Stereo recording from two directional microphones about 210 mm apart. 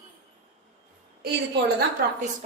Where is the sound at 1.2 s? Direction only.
50° right (ahead or behind).